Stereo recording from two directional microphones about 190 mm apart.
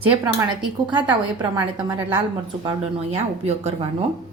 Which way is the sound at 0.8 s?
25° right (ahead or behind).